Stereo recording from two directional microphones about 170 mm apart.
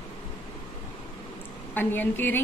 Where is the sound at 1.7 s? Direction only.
10° left (ahead or behind).